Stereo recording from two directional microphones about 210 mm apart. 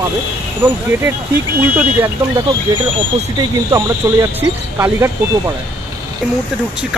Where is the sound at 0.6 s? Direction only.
10° right (ahead or behind).